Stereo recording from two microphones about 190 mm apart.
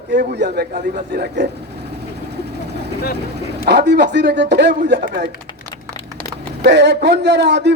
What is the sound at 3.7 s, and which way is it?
A man's voice, 65° right (ahead or behind).